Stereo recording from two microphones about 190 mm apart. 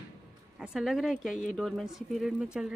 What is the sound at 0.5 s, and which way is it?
A woman's voice, 5° right (ahead or behind).